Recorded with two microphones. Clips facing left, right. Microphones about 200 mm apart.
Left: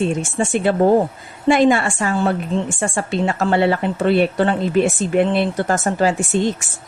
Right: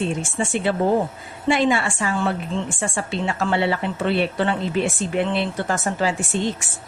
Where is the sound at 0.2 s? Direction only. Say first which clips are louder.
Left 4 dB; 45° left (ahead or behind).